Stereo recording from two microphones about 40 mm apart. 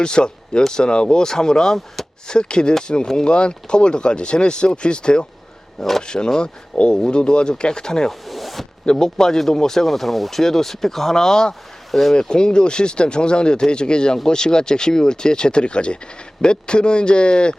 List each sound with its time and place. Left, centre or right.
0.0 s speech: left
8.3 s zipper: centre
8.9 s speech: centre
12.3 s speech: left